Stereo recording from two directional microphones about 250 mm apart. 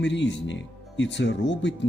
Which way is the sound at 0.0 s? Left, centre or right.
Left.